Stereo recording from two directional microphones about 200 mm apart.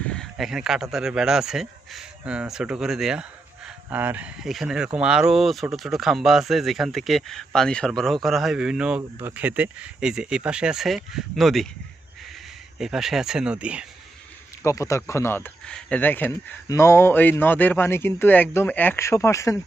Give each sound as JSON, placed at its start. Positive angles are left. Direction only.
{"t": 0.0, "sound": "speech", "side_deg": 5}
{"t": 12.8, "sound": "speech", "side_deg": 0}
{"t": 14.6, "sound": "speech", "side_deg": 15}